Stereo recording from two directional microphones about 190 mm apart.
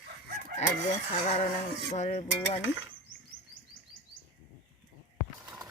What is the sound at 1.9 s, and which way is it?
Speech, 40° left (ahead or behind).